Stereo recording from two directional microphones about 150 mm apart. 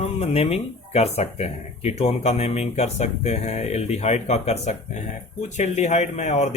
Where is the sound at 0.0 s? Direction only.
40° left (ahead or behind).